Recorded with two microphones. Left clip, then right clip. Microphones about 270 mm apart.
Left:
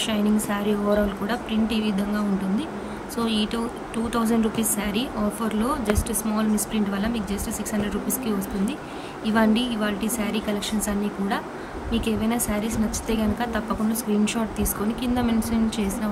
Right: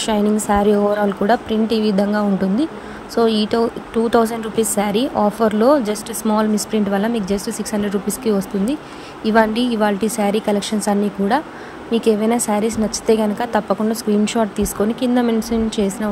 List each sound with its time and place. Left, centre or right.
0.0 s speech: centre